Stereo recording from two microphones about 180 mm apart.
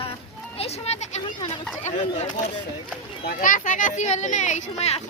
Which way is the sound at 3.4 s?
45° left (ahead or behind).